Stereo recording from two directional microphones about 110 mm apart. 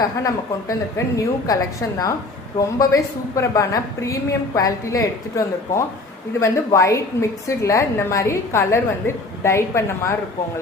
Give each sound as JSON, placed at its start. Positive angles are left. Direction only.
{"t": 0.0, "sound": "a woman's voice", "side_deg": 35}
{"t": 2.6, "sound": "a woman's voice", "side_deg": 30}
{"t": 6.4, "sound": "a woman's voice", "side_deg": 30}